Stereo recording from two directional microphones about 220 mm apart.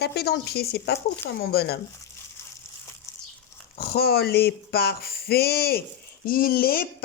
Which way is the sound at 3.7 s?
45° left (ahead or behind).